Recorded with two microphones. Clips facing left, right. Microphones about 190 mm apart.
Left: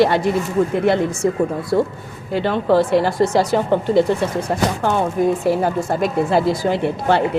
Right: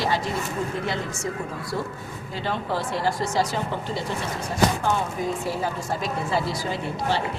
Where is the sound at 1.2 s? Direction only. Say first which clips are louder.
Left 12 dB; 60° left (ahead or behind).